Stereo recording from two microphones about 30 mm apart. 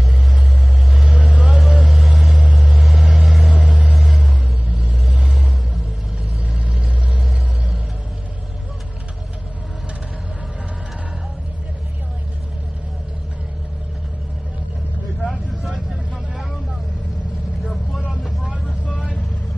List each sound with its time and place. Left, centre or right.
0.9 s vehicle: centre
4.6 s vehicle: right